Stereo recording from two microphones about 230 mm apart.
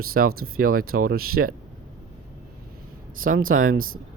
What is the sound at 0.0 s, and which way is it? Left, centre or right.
Speech, right.